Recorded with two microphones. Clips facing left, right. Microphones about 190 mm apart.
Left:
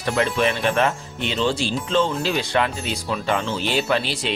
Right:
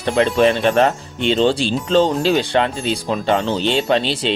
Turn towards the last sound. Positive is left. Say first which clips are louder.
# right 5 dB
turn(degrees=-30)  # may be behind; listen again after turning